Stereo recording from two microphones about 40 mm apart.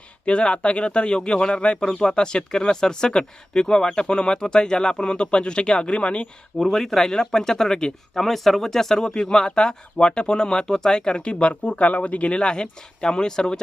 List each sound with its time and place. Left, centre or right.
0.3 s speech: left
6.7 s speech: centre
8.2 s speech: centre